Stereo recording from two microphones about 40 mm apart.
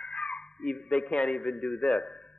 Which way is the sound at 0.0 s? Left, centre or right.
Left.